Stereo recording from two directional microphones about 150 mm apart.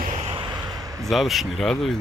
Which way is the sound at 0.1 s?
40° right (ahead or behind).